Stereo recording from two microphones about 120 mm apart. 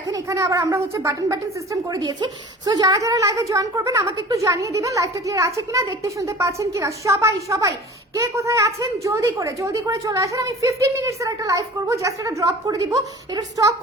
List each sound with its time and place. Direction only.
0.1 s a woman's voice: 25° right (ahead or behind)